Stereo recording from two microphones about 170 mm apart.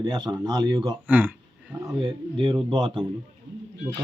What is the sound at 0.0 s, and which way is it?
Speech, 25° right (ahead or behind).